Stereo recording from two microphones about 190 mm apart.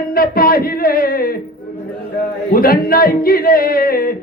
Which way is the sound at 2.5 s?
50° left (ahead or behind).